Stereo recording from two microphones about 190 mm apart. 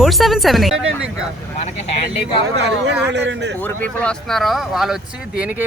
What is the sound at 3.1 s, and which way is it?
Speech, 65° right (ahead or behind).